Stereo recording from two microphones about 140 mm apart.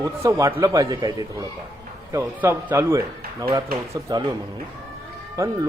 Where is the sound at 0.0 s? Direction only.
25° right (ahead or behind).